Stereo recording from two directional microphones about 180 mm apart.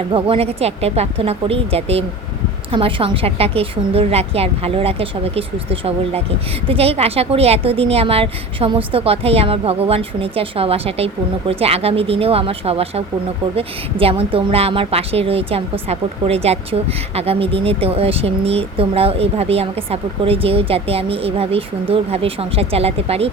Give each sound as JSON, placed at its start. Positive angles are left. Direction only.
{"t": 0.1, "sound": "a woman's voice", "side_deg": -30}